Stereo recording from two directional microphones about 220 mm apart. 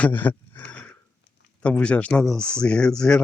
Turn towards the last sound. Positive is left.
turn(degrees=5)  # may be behind; listen again after turning